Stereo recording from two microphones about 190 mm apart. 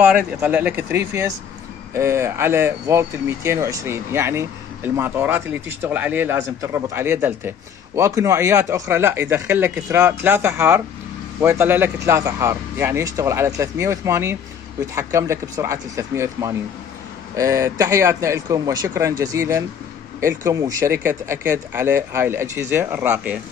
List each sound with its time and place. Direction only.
0.4 s speech: 10° right (ahead or behind)